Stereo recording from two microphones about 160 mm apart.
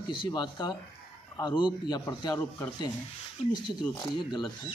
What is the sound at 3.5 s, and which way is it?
Speech, 30° left (ahead or behind).